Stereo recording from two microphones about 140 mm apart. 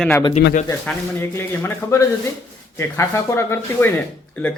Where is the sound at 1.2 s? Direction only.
20° left (ahead or behind).